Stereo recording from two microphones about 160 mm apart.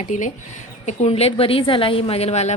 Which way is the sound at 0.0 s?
50° left (ahead or behind).